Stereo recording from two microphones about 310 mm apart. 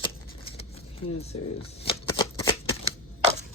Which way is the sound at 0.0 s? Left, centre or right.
Centre.